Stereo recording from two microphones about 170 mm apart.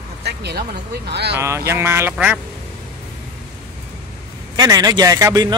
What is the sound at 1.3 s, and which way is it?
A man's voice, 15° right (ahead or behind).